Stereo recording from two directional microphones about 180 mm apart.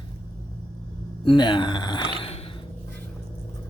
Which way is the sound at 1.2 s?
25° left (ahead or behind).